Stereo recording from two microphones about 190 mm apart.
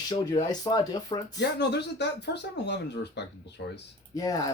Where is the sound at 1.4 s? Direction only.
60° left (ahead or behind).